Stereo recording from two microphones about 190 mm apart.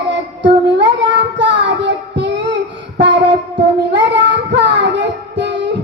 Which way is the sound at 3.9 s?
65° right (ahead or behind).